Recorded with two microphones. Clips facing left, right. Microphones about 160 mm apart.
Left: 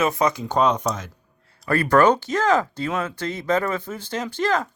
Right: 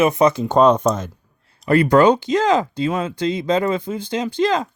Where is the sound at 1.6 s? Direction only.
20° right (ahead or behind).